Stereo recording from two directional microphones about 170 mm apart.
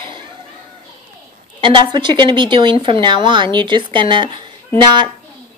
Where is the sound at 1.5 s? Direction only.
30° right (ahead or behind).